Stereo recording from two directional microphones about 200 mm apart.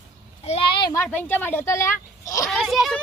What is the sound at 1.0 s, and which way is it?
Speech, 10° left (ahead or behind).